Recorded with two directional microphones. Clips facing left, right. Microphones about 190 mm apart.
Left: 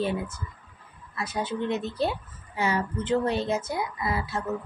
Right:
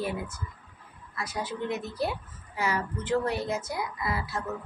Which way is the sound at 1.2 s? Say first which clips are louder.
Left 4 dB; 25° left (ahead or behind).